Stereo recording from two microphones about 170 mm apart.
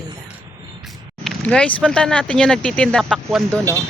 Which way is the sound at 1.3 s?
5° left (ahead or behind).